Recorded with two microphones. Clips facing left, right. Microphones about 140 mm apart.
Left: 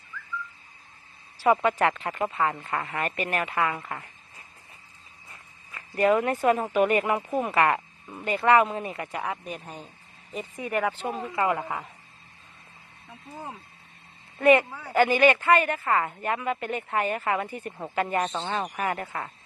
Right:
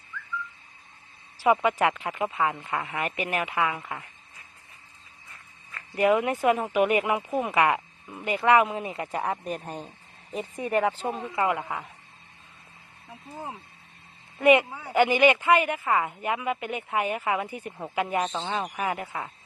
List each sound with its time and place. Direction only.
1.4 s speech: 10° right (ahead or behind)
5.9 s speech: 10° right (ahead or behind)
9.1 s speech: 35° right (ahead or behind)
10.5 s speech: 30° right (ahead or behind)
11.5 s speech: centre (ahead or behind)
13.3 s speech: 20° right (ahead or behind)